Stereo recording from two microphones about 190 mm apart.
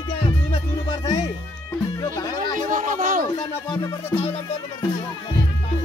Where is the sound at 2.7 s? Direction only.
45° right (ahead or behind).